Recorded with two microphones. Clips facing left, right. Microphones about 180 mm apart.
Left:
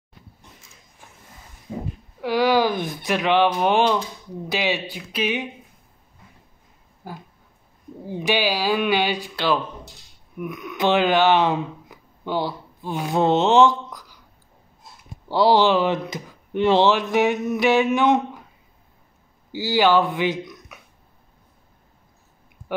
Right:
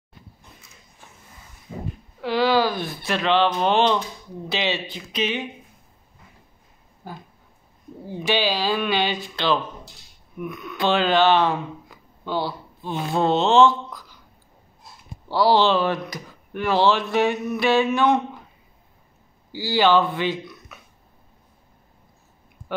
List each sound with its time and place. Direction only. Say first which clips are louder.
2.2 s speech: left 1 dB; 15° left (ahead or behind)
7.0 s dog: left 1 dB; 10° left (ahead or behind)
8.0 s speech: left 1 dB; 15° left (ahead or behind)
15.2 s speech: left 1 dB; 15° left (ahead or behind)
19.5 s speech: left 1 dB; 15° left (ahead or behind)